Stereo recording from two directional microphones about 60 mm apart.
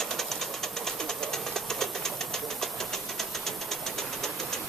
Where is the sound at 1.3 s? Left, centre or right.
Centre.